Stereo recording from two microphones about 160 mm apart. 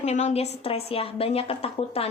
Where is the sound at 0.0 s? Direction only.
45° left (ahead or behind).